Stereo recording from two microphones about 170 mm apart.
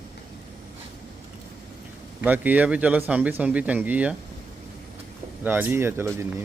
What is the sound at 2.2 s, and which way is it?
A man's voice, 10° right (ahead or behind).